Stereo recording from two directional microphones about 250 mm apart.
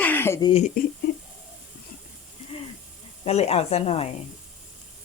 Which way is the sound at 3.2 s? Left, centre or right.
Left.